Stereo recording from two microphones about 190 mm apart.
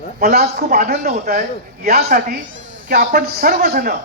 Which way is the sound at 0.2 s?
55° right (ahead or behind).